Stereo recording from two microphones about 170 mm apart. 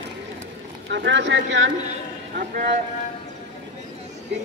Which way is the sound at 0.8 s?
90° right.